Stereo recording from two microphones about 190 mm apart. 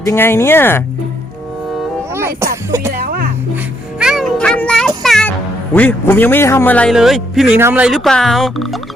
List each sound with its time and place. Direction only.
0.0 s speech: 15° left (ahead or behind)
2.1 s music: 15° right (ahead or behind)
2.9 s speech: 50° right (ahead or behind)
4.0 s music: centre (ahead or behind)
5.7 s a man's voice: 10° left (ahead or behind)